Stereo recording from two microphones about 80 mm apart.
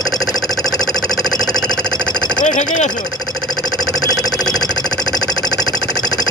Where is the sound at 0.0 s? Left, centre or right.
Centre.